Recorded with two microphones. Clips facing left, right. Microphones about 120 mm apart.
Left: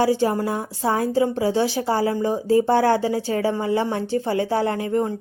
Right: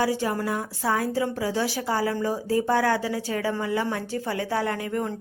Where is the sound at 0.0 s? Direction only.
30° left (ahead or behind).